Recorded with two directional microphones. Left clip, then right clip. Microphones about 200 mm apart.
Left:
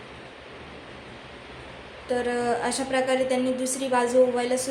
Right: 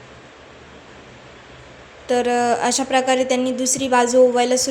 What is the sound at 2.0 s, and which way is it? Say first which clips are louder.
A woman's voice: right 8 dB; 35° right (ahead or behind).